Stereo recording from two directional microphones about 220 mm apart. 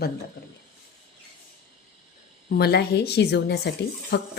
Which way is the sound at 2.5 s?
45° left (ahead or behind).